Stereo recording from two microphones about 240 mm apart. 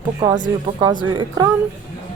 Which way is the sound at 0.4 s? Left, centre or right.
Centre.